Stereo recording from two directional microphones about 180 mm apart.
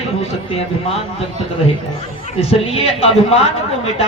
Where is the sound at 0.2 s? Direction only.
35° left (ahead or behind).